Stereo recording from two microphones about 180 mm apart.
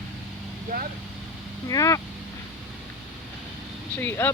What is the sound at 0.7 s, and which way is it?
Speech, 50° right (ahead or behind).